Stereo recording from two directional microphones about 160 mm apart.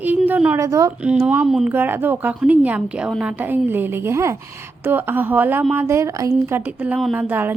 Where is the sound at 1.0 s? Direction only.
5° right (ahead or behind).